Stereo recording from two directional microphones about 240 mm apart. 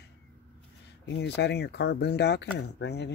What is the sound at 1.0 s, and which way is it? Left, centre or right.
Speech, left.